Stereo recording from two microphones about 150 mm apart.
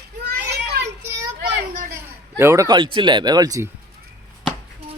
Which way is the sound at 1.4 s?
70° right (ahead or behind).